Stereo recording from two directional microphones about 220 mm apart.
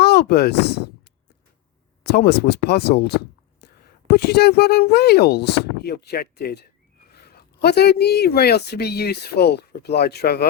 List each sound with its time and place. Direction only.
0.0 s speech: 50° left (ahead or behind)
2.0 s speech: 50° left (ahead or behind)